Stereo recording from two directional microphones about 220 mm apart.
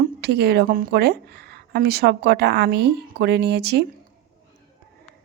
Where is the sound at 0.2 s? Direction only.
50° right (ahead or behind).